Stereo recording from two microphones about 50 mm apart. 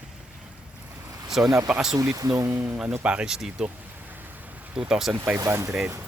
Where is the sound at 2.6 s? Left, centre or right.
Centre.